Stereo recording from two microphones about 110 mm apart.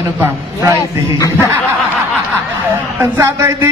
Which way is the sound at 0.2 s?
25° right (ahead or behind).